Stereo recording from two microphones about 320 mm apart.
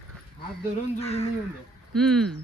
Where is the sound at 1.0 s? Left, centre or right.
Centre.